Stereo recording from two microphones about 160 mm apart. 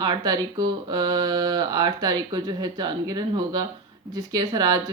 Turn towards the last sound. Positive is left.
turn(degrees=-25)  # may be behind; listen again after turning